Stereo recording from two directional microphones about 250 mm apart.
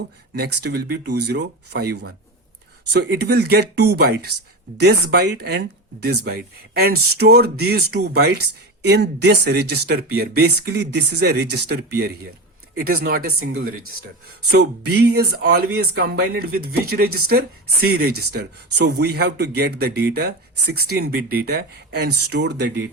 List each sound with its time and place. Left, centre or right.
0.3 s speech: right
14.5 s speech: right